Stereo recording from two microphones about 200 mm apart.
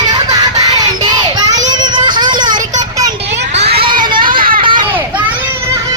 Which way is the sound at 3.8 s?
25° right (ahead or behind).